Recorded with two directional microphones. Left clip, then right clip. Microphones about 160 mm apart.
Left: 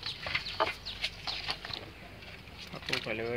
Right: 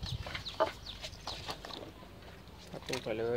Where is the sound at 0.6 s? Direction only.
65° right (ahead or behind).